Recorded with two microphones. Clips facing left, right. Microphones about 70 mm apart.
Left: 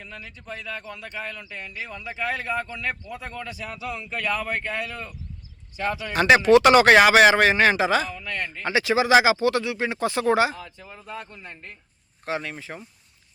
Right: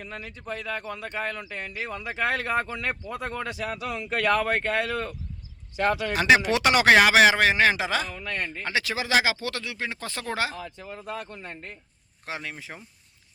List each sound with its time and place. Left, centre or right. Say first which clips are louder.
0.0 s speech: right 3 dB; right
5.7 s speech: right 3 dB; right
6.1 s speech: left 7 dB; centre
8.1 s speech: left 1 dB; right
8.6 s speech: left 9 dB; centre
11.0 s speech: right 1 dB; right
12.2 s speech: left 6 dB; centre